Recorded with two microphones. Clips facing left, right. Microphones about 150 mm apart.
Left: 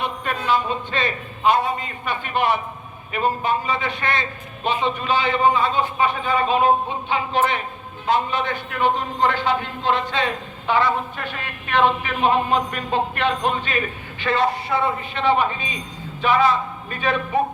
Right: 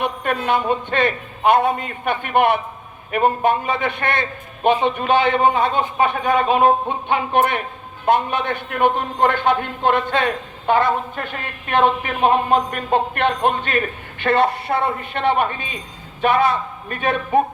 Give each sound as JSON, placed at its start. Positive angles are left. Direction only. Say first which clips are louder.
{"t": 0.0, "sound": "a man's voice", "louder": "right 4 dB", "side_deg": -55}